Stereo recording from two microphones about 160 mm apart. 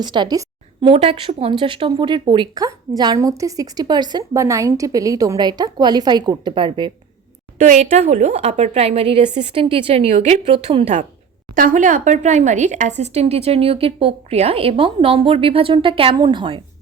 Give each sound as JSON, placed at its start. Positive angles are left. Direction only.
{"t": 0.0, "sound": "a woman's voice", "side_deg": -25}
{"t": 7.6, "sound": "speech", "side_deg": -55}
{"t": 11.5, "sound": "speech", "side_deg": -55}